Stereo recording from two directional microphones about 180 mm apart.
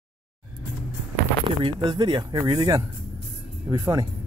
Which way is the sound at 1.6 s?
25° right (ahead or behind).